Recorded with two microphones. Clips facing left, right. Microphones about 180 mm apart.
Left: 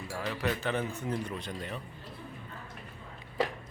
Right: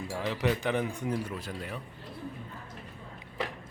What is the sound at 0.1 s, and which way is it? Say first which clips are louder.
Speech: right 3 dB; 20° right (ahead or behind).